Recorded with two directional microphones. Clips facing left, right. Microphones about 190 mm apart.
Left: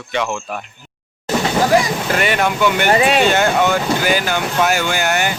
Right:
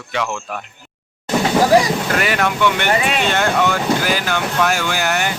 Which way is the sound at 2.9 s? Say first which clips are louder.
Left 4 dB; 40° left (ahead or behind).